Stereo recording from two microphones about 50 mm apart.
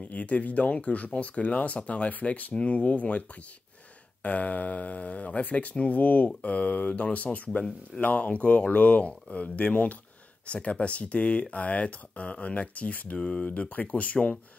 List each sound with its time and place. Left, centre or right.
0.0 s speech: left
13.2 s speech: centre
13.5 s speech: left